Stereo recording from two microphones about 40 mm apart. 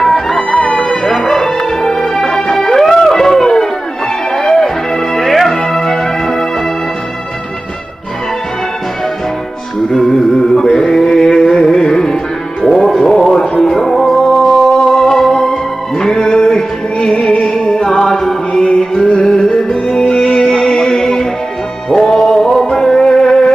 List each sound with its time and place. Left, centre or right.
0.0 s music: centre
0.4 s music: left
0.7 s music: centre
9.8 s music: centre
11.5 s carnatic music: centre
12.8 s music: centre